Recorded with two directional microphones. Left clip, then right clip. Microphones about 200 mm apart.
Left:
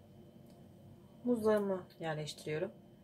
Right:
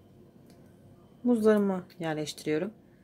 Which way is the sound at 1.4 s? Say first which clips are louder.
Right 7 dB; 55° right (ahead or behind).